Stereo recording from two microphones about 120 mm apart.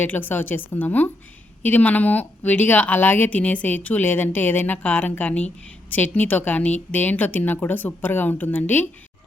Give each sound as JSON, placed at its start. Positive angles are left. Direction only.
{"t": 0.0, "sound": "speech", "side_deg": 15}